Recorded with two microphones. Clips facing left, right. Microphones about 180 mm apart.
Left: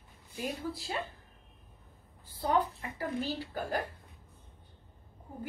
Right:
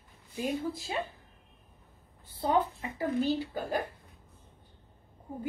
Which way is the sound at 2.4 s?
20° right (ahead or behind).